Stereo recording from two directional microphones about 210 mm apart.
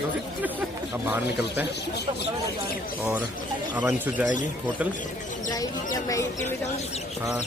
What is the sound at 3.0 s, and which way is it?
Speech, 5° right (ahead or behind).